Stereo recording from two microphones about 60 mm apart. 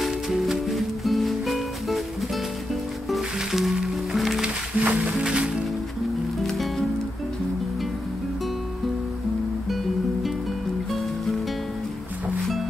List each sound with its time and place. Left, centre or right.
0.0 s music: centre
4.4 s music: right
5.0 s music: centre
6.4 s music: centre
10.9 s music: centre